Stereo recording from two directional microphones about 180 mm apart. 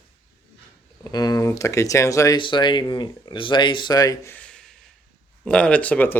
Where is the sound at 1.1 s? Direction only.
20° left (ahead or behind).